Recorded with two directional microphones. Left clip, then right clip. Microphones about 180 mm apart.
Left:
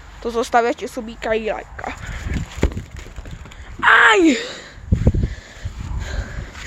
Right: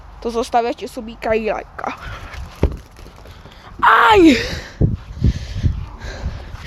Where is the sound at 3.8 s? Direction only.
40° right (ahead or behind).